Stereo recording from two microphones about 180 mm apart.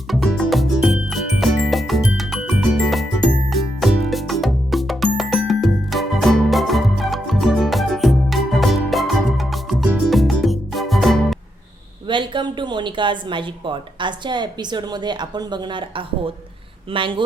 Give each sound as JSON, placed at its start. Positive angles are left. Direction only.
{"t": 0.1, "sound": "music", "side_deg": 0}
{"t": 12.0, "sound": "speech", "side_deg": -25}